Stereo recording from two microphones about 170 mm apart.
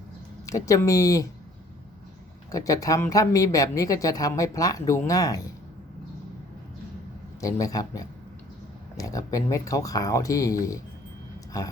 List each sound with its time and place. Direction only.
0.4 s a woman's voice: 20° left (ahead or behind)
2.5 s a woman's voice: 20° left (ahead or behind)
7.4 s a woman's voice: 20° left (ahead or behind)